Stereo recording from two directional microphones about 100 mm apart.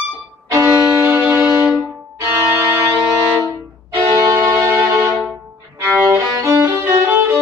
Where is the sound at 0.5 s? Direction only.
25° right (ahead or behind).